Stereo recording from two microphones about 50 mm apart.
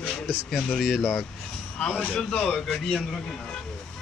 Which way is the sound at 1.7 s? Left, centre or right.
Left.